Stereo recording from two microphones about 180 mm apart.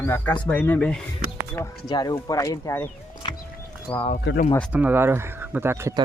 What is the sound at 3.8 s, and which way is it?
Speech, 30° left (ahead or behind).